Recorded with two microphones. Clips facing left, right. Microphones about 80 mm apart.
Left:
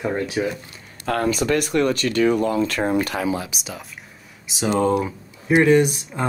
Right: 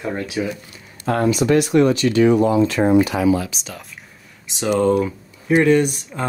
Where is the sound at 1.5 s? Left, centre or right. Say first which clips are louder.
Right 7 dB; left.